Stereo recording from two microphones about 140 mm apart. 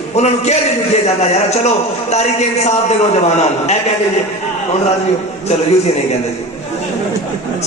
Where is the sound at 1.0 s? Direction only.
50° left (ahead or behind).